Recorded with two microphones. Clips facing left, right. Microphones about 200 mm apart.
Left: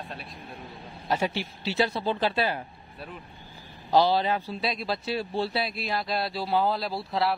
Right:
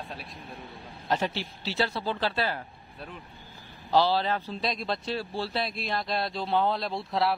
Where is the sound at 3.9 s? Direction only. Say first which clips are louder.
Left 2 dB; 15° left (ahead or behind).